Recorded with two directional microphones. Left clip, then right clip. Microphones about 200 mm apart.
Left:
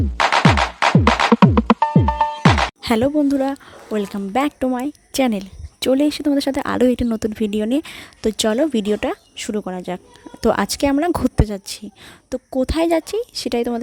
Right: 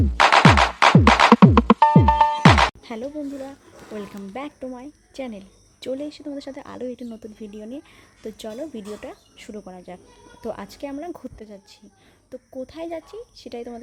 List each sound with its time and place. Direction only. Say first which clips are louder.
0.0 s music: right 1 dB; centre (ahead or behind)
2.8 s speech: left 14 dB; 50° left (ahead or behind)